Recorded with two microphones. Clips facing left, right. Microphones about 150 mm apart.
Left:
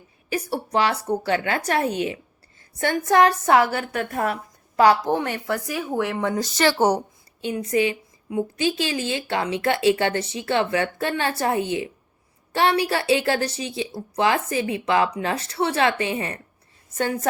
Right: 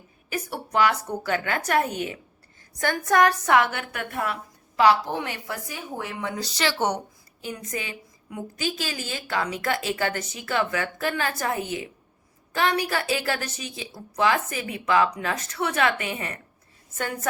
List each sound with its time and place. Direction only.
0.3 s a woman's voice: 30° left (ahead or behind)
2.8 s a woman's voice: 25° left (ahead or behind); by 5.5 s 50° left (ahead or behind)
5.6 s speech: 75° left (ahead or behind)
6.1 s a woman's voice: 50° left (ahead or behind); by 16.4 s 30° left (ahead or behind)